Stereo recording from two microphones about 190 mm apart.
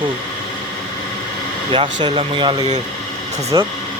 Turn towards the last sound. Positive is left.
turn(degrees=-20)  # may be behind; listen again after turning